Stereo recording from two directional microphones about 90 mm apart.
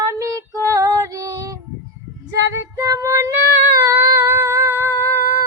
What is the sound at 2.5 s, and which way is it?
Child singing, 30° right (ahead or behind).